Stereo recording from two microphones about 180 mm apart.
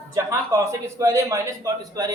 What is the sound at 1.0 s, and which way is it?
A man's voice, 20° right (ahead or behind).